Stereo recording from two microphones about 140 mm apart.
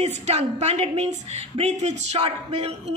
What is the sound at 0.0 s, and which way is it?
A man's voice, 50° right (ahead or behind).